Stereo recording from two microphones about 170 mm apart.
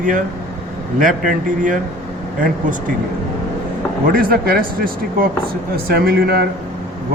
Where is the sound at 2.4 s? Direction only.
50° right (ahead or behind).